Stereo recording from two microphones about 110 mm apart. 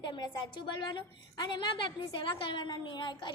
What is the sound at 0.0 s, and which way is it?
A woman's voice, 40° left (ahead or behind).